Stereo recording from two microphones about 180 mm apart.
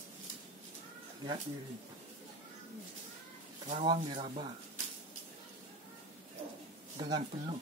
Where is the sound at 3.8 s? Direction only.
25° right (ahead or behind).